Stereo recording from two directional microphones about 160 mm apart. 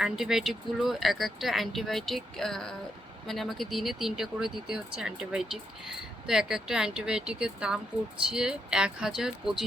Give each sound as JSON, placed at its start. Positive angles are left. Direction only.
{"t": 0.0, "sound": "speech", "side_deg": -5}